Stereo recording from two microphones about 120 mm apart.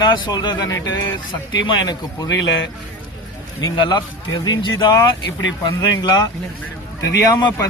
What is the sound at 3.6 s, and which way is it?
A man's voice, 40° left (ahead or behind).